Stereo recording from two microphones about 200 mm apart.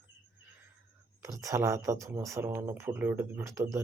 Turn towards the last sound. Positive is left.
turn(degrees=-15)  # may be behind; listen again after turning